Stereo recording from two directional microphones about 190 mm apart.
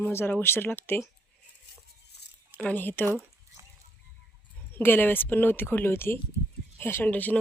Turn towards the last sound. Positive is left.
turn(degrees=10)  # may be behind; listen again after turning